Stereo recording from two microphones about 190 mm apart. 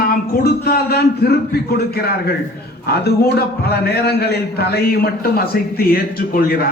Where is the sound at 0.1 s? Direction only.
55° left (ahead or behind).